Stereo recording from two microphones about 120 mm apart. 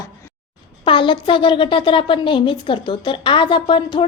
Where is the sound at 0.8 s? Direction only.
45° left (ahead or behind).